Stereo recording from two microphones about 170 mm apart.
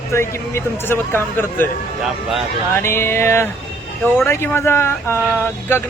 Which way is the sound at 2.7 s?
15° left (ahead or behind).